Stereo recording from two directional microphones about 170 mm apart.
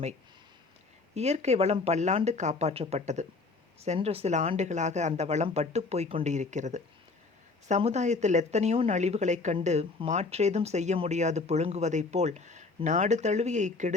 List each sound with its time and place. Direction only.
1.1 s speech: 40° right (ahead or behind)